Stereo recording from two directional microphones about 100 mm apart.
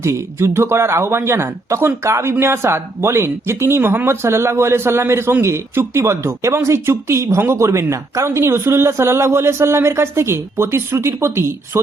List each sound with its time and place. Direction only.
0.0 s speech: 30° right (ahead or behind)